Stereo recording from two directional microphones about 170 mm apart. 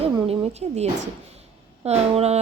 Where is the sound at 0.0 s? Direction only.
35° right (ahead or behind).